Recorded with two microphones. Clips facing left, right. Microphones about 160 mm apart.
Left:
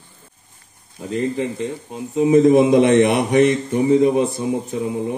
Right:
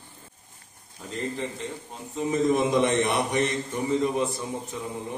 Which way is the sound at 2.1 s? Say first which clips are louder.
Left 11 dB; 65° left (ahead or behind).